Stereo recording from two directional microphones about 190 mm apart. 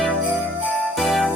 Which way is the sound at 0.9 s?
Centre (ahead or behind).